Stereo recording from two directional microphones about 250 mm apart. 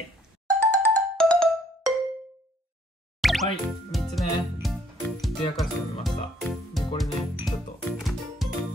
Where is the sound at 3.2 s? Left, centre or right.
Centre.